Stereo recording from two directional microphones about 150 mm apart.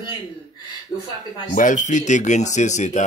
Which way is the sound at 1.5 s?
55° left (ahead or behind).